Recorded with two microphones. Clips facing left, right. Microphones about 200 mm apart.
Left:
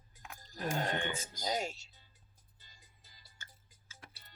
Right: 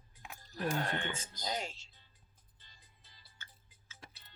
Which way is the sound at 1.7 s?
40° left (ahead or behind).